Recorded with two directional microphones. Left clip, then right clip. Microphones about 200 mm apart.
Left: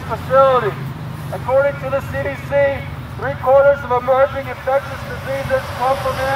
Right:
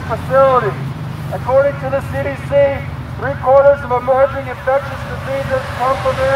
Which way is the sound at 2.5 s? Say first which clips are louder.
Right 3 dB; 35° left (ahead or behind).